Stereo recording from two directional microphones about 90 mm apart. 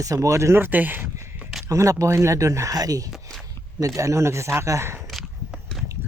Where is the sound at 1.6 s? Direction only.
35° right (ahead or behind).